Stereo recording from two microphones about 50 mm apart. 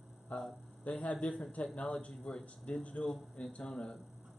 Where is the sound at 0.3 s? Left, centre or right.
Left.